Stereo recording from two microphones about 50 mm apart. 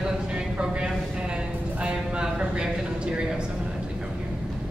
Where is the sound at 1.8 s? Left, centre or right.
Centre.